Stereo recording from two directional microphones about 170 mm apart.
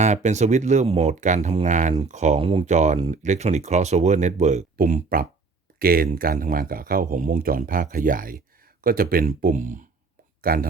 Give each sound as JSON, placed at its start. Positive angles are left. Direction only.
{"t": 0.0, "sound": "speech", "side_deg": -45}
{"t": 10.4, "sound": "speech", "side_deg": -60}